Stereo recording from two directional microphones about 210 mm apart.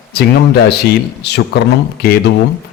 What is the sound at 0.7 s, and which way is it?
Speech, 50° left (ahead or behind).